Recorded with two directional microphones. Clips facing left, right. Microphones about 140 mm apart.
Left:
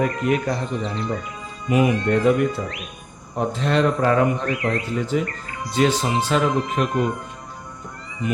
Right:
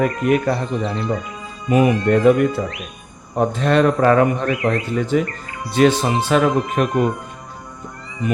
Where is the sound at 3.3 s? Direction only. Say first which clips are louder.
Right 4 dB; 55° right (ahead or behind).